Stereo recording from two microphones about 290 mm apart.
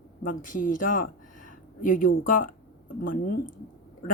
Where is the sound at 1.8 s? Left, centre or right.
Left.